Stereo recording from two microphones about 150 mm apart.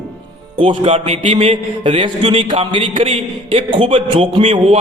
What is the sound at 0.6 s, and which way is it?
A man's voice, 35° right (ahead or behind).